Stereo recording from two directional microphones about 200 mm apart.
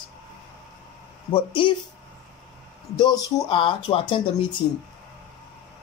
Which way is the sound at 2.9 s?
20° left (ahead or behind).